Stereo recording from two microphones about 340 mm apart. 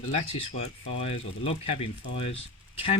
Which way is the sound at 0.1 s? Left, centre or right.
Centre.